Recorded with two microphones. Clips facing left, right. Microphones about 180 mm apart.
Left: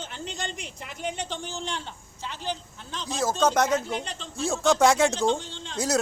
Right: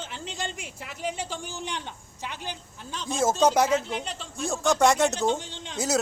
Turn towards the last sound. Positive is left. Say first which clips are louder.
# left 1 dB
turn(degrees=-15)  # may be behind; listen again after turning